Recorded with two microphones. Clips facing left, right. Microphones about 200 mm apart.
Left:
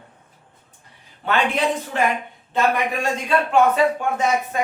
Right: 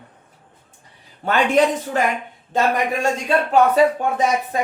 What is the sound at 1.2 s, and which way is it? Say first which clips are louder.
Speech: right 4 dB; 45° right (ahead or behind).